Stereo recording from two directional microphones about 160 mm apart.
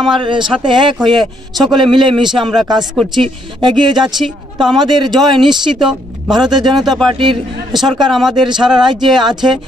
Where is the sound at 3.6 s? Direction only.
30° right (ahead or behind).